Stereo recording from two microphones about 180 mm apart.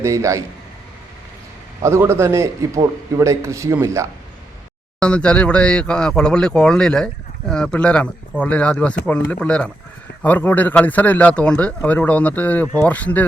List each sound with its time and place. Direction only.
0.0 s a man's voice: 15° right (ahead or behind)
1.8 s a man's voice: 15° right (ahead or behind)
4.9 s speech: 5° left (ahead or behind)